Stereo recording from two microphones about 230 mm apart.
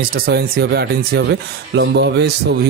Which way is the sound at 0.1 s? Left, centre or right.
Right.